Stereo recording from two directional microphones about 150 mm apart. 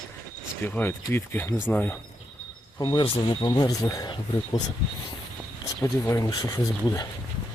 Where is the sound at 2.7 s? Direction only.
30° left (ahead or behind).